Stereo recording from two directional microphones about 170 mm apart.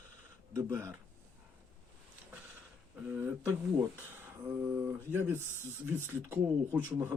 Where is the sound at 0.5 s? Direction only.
15° right (ahead or behind).